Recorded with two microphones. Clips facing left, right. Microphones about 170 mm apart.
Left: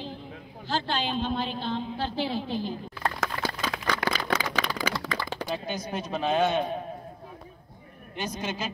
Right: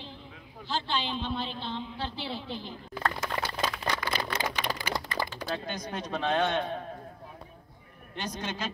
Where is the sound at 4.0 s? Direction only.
90° left.